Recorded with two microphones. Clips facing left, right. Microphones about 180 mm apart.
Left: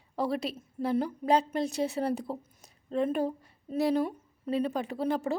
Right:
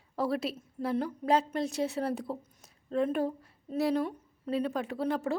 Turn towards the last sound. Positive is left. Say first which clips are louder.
# left 1 dB
turn(degrees=0)  # may be behind; listen again after turning